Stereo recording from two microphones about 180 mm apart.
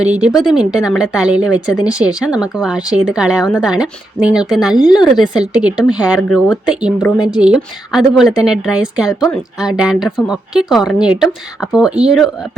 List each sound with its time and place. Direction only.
0.0 s speech: 5° right (ahead or behind)